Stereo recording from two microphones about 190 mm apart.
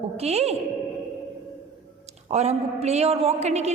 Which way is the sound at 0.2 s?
35° right (ahead or behind).